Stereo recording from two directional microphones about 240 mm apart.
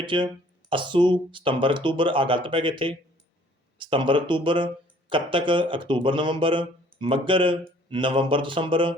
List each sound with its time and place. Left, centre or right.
0.0 s speech: centre